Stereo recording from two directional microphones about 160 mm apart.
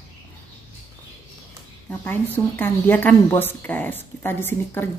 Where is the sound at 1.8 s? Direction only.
10° left (ahead or behind).